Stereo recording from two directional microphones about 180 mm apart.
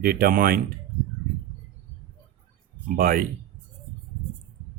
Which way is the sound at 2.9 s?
50° right (ahead or behind).